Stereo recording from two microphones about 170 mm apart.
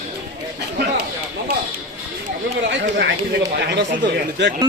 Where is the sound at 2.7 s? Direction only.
90° right.